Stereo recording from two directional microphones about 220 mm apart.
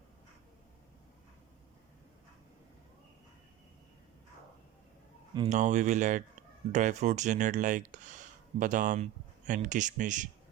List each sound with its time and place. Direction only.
5.5 s speech: 30° right (ahead or behind)